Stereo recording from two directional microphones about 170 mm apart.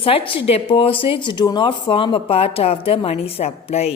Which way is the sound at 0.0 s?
35° left (ahead or behind).